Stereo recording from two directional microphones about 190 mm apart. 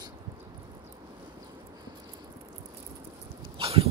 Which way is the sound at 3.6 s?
30° right (ahead or behind).